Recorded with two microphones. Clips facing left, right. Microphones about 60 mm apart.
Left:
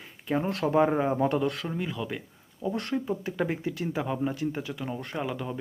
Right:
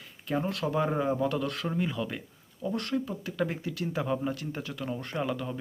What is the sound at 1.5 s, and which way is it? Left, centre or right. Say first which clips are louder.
Speech: right 2 dB; centre.